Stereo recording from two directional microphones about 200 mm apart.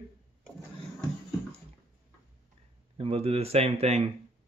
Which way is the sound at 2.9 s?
30° right (ahead or behind).